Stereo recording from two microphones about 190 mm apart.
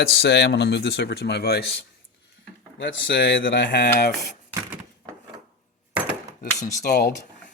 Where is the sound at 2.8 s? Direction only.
80° left; by 4.1 s 60° left (ahead or behind).